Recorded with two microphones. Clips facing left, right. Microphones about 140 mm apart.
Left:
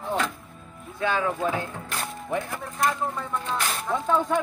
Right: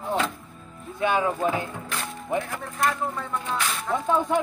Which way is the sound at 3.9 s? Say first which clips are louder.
Even; 15° right (ahead or behind).